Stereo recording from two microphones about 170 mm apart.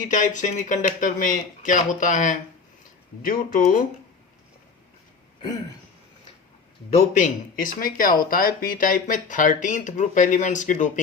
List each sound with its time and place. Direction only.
0.0 s speech: 50° left (ahead or behind)
6.9 s speech: 50° left (ahead or behind)